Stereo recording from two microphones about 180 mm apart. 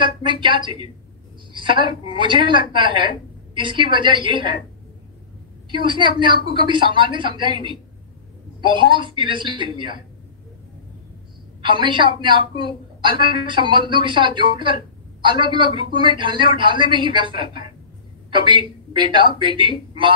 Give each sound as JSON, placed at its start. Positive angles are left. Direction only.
{"t": 0.0, "sound": "a woman's voice", "side_deg": -25}
{"t": 5.7, "sound": "a woman's voice", "side_deg": -25}
{"t": 11.6, "sound": "a woman's voice", "side_deg": -25}